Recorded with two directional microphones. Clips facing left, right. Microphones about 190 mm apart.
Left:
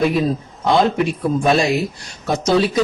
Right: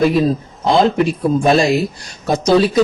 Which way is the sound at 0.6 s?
35° right (ahead or behind).